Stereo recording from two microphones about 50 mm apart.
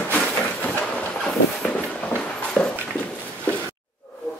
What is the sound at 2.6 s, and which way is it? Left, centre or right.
Dog, centre.